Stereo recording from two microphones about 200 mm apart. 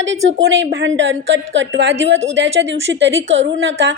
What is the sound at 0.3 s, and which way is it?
A woman's voice, 65° right (ahead or behind).